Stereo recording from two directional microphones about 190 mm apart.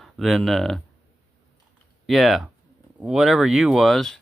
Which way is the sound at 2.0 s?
Centre (ahead or behind).